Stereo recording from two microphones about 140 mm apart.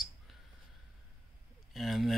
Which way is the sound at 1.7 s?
Centre (ahead or behind).